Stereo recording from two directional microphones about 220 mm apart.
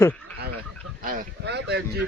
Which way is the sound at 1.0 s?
40° right (ahead or behind).